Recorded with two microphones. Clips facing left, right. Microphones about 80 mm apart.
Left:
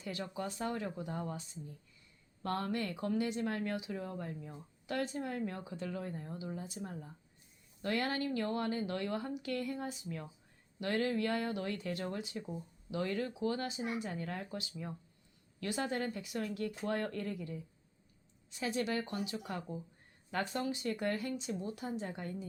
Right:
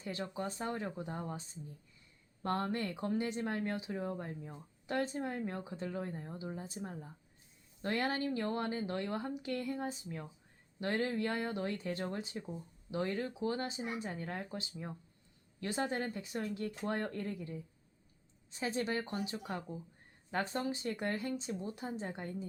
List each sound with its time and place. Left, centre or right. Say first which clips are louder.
0.0 s speech: right 1 dB; right
2.4 s speech: right 1 dB; right
12.4 s speech: left 1 dB; centre
12.9 s speech: even; right